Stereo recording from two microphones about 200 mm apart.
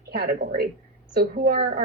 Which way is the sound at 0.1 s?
55° right (ahead or behind).